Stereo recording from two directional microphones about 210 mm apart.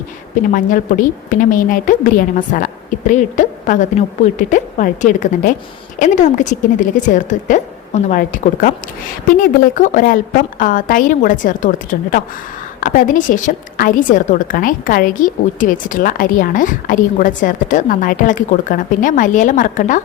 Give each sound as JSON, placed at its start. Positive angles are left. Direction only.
{"t": 0.5, "sound": "a woman's voice", "side_deg": 40}